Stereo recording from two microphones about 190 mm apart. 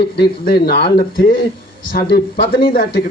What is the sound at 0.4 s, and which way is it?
Speech, 55° left (ahead or behind).